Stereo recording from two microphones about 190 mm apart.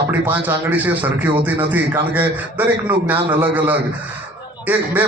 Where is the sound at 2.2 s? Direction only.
10° right (ahead or behind).